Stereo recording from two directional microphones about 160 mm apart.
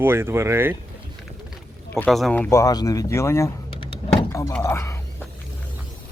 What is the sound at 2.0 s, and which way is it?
Speech, 5° left (ahead or behind).